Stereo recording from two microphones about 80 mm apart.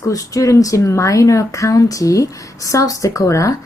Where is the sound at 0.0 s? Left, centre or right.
Left.